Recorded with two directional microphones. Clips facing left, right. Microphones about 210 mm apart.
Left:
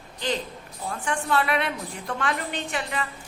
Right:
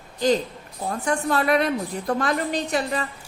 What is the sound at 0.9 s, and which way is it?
A woman's voice, 40° right (ahead or behind).